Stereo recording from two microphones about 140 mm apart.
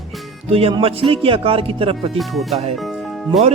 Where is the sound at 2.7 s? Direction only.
Centre (ahead or behind).